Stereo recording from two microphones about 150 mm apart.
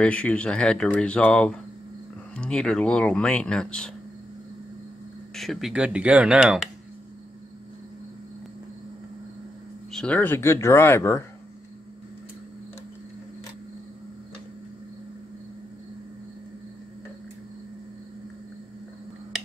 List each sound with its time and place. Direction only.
0.0 s speech: 10° left (ahead or behind)
5.3 s speech: centre (ahead or behind)
9.9 s speech: 10° left (ahead or behind)